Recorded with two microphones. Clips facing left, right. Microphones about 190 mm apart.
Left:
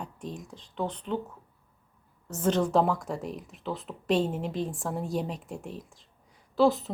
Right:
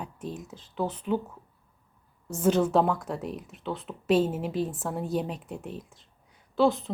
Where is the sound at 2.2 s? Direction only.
10° right (ahead or behind).